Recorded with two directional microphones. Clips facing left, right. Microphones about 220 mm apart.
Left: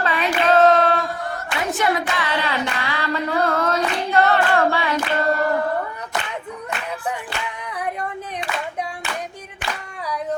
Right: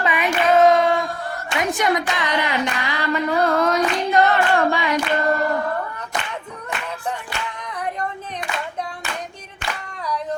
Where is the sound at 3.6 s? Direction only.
15° right (ahead or behind).